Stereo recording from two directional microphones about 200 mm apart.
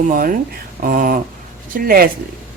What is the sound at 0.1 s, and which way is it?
Speech, 45° right (ahead or behind).